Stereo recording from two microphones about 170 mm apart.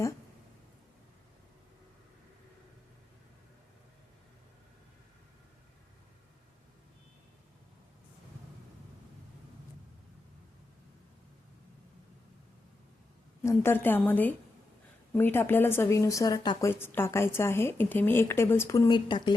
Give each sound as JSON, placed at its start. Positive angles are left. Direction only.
{"t": 13.4, "sound": "a woman's voice", "side_deg": 15}
{"t": 18.9, "sound": "speech", "side_deg": 25}